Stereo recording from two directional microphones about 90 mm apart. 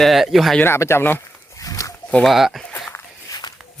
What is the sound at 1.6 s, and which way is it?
Pig, 35° left (ahead or behind).